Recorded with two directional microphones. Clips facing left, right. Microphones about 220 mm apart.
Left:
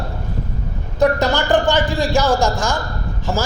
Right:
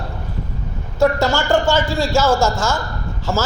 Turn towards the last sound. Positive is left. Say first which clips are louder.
# even
turn(degrees=15)  # may be behind; listen again after turning